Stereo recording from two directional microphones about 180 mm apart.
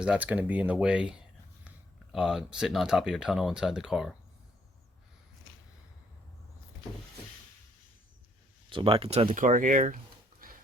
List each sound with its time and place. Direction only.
0.0 s speech: 5° right (ahead or behind)
8.7 s speech: 30° right (ahead or behind)